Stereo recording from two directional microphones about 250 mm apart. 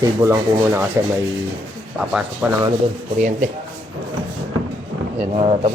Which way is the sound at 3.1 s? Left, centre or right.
Right.